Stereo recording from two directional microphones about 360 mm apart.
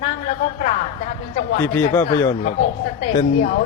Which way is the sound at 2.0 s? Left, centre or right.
Centre.